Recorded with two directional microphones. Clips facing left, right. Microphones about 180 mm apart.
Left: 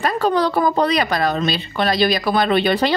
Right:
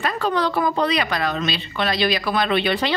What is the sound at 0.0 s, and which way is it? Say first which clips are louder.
Speech: left 4 dB; 40° left (ahead or behind).